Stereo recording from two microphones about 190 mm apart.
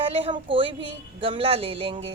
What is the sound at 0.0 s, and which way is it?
A woman's voice, 30° right (ahead or behind).